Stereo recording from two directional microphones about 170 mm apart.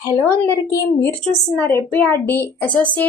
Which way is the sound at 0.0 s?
15° left (ahead or behind).